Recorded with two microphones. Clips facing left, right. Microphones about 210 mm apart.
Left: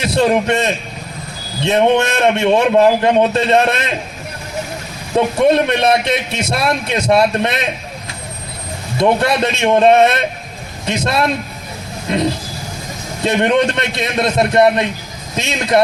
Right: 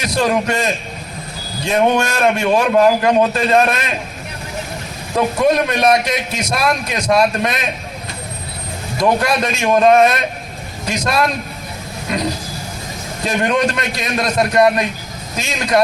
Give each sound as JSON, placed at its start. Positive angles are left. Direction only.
{"t": 0.0, "sound": "a man's voice", "side_deg": 30}
{"t": 5.1, "sound": "a man's voice", "side_deg": 30}
{"t": 9.0, "sound": "a man's voice", "side_deg": 30}